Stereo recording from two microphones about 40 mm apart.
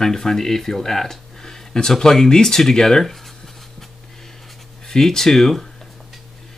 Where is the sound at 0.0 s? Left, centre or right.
Centre.